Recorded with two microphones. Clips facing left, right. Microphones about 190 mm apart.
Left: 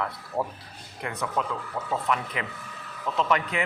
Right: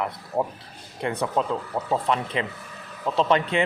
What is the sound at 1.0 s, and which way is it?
Speech, 30° right (ahead or behind).